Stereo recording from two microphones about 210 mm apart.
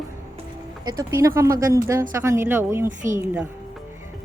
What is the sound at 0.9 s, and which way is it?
Speech, 15° right (ahead or behind).